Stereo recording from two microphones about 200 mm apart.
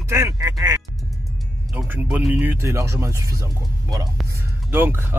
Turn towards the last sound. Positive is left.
turn(degrees=-10)  # may be behind; listen again after turning